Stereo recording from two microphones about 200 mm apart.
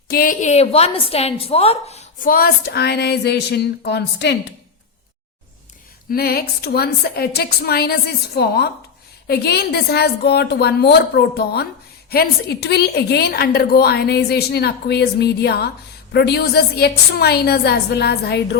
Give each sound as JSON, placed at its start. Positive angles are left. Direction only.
{"t": 0.1, "sound": "a woman's voice", "side_deg": 45}
{"t": 2.3, "sound": "speech", "side_deg": 50}
{"t": 6.1, "sound": "a woman's voice", "side_deg": 50}